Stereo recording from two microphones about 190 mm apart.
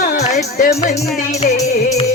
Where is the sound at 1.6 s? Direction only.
35° left (ahead or behind).